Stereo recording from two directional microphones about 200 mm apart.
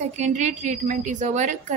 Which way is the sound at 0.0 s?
35° right (ahead or behind).